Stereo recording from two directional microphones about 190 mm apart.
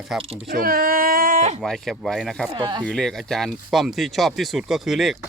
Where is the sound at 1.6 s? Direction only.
5° left (ahead or behind).